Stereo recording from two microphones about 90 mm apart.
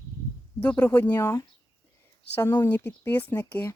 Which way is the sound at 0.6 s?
15° left (ahead or behind).